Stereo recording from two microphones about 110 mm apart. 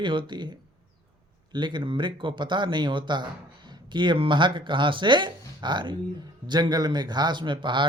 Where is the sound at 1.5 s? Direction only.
45° right (ahead or behind).